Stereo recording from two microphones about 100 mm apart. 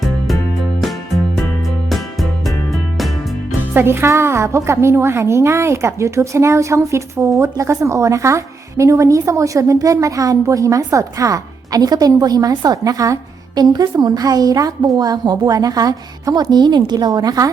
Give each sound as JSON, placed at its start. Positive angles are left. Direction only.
{"t": 3.8, "sound": "a woman's voice", "side_deg": -25}